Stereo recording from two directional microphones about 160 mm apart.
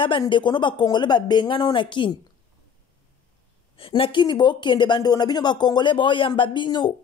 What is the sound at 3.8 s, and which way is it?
A woman's voice, 35° left (ahead or behind).